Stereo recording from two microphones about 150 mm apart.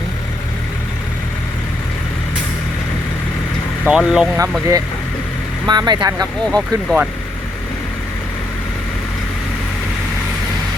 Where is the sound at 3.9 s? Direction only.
5° right (ahead or behind).